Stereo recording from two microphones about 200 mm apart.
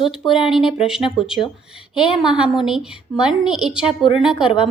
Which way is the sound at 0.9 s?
Centre (ahead or behind).